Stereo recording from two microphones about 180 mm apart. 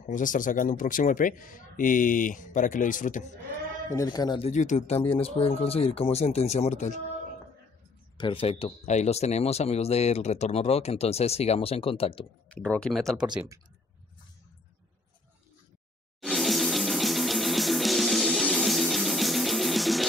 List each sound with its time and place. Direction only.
0.1 s speech: 45° left (ahead or behind)
3.9 s speech: 20° left (ahead or behind)
4.5 s speech: 40° left (ahead or behind)
8.2 s speech: 30° left (ahead or behind)
12.4 s speech: 5° left (ahead or behind)
16.2 s music: centre (ahead or behind)